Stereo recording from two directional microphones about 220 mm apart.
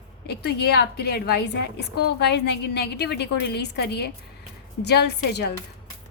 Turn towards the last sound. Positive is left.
turn(degrees=50)  # may be behind; listen again after turning